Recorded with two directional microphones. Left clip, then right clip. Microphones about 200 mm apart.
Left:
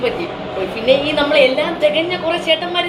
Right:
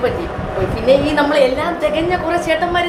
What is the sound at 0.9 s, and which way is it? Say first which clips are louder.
Speech: right 1 dB; 20° right (ahead or behind).